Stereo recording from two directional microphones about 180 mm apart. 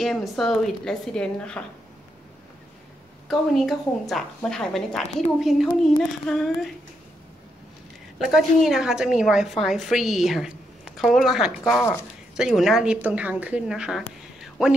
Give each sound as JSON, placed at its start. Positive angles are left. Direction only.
{"t": 0.0, "sound": "a woman's voice", "side_deg": 0}
{"t": 3.3, "sound": "a woman's voice", "side_deg": 0}
{"t": 8.3, "sound": "a woman's voice", "side_deg": 0}
{"t": 11.6, "sound": "speech", "side_deg": 15}
{"t": 12.4, "sound": "a woman's voice", "side_deg": 0}